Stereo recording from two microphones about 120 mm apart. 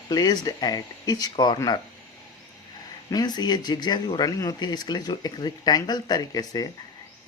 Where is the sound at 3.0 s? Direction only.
35° left (ahead or behind).